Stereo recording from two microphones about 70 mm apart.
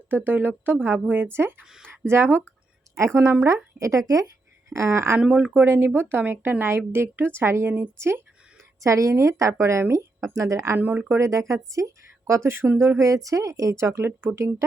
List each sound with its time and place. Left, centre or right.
0.3 s speech: right
3.8 s a woman's voice: right
4.7 s speech: right
5.2 s speech: right
8.8 s a woman's voice: right
10.8 s speech: right
11.2 s a woman's voice: right